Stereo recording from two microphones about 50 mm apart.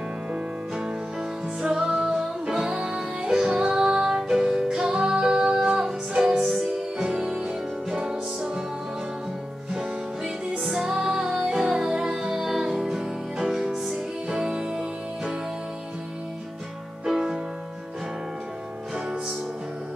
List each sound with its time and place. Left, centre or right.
0.3 s music: centre
9.7 s music: centre
17.0 s music: centre